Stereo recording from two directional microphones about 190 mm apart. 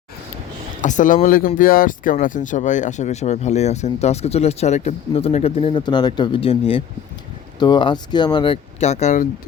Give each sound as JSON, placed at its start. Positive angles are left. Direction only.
{"t": 0.8, "sound": "speech", "side_deg": 40}
{"t": 8.8, "sound": "speech", "side_deg": 35}